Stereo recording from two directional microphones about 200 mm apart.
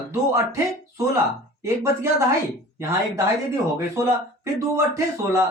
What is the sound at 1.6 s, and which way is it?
Speech, 15° right (ahead or behind).